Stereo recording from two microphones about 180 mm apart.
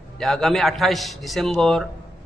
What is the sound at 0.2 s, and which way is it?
A man's voice, centre (ahead or behind).